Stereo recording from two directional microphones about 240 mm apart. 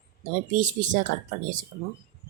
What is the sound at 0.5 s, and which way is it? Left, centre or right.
Speech, right.